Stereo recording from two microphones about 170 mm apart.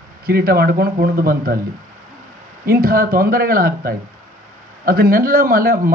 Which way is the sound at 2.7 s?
60° right (ahead or behind).